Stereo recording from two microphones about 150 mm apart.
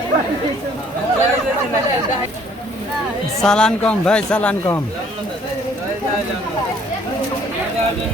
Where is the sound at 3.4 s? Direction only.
5° left (ahead or behind).